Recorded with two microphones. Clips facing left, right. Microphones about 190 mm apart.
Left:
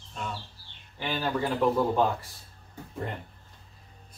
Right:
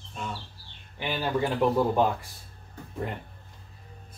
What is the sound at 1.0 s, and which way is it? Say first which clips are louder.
Speech: right 1 dB; 10° right (ahead or behind).